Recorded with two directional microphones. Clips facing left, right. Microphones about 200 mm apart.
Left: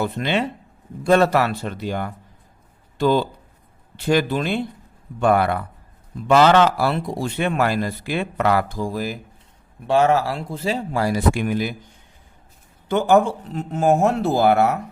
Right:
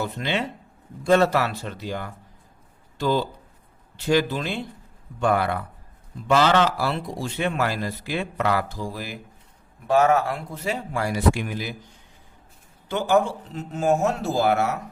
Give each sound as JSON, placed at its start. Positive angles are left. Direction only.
{"t": 0.0, "sound": "speech", "side_deg": 60}
{"t": 9.8, "sound": "speech", "side_deg": 30}
{"t": 11.3, "sound": "speech", "side_deg": 55}
{"t": 12.9, "sound": "a man's voice", "side_deg": 50}